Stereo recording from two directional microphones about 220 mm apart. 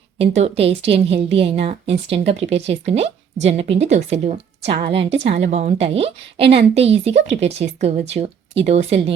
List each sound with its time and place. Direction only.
0.2 s a woman's voice: 25° right (ahead or behind)